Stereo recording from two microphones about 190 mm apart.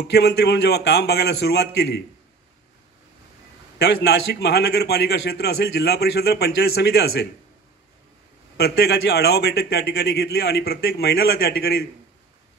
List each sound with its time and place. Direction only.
0.1 s a man's voice: 60° left (ahead or behind)
3.7 s a man's voice: 60° left (ahead or behind)
8.5 s a man's voice: 55° left (ahead or behind)